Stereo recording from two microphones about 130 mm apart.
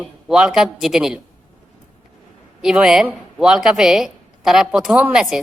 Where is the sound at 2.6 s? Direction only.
5° right (ahead or behind).